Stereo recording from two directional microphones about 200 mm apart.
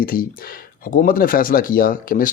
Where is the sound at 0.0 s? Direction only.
45° left (ahead or behind).